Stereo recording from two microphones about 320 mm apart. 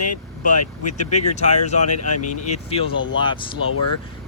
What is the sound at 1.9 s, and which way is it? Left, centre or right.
Speech, left.